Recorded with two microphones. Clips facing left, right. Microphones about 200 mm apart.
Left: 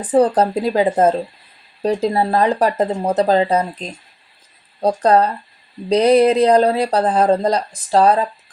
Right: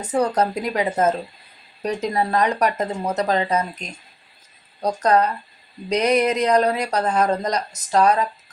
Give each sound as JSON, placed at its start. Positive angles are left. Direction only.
{"t": 0.0, "sound": "speech", "side_deg": 30}